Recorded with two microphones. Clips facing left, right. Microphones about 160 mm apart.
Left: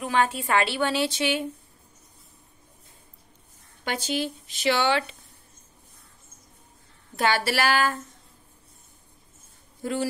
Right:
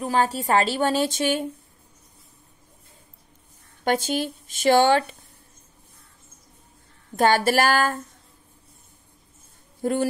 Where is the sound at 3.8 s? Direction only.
50° right (ahead or behind).